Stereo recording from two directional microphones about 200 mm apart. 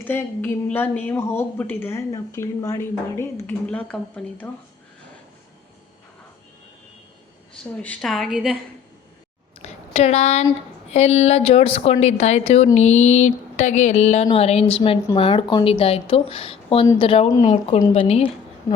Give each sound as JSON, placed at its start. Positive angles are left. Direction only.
{"t": 0.1, "sound": "a woman's voice", "side_deg": 10}
{"t": 7.5, "sound": "a woman's voice", "side_deg": 5}
{"t": 9.6, "sound": "a sound", "side_deg": 35}
{"t": 10.9, "sound": "speech", "side_deg": 30}